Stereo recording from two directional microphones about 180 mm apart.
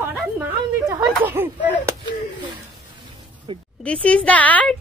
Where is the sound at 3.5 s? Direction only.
25° right (ahead or behind).